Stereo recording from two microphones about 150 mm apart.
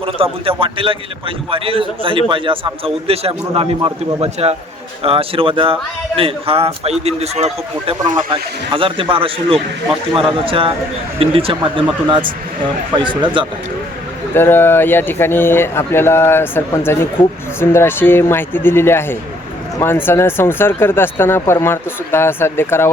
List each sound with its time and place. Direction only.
0.0 s a man's voice: 35° right (ahead or behind)
8.0 s a man's voice: 30° right (ahead or behind)
13.0 s a man's voice: 30° right (ahead or behind)
14.3 s speech: 15° left (ahead or behind)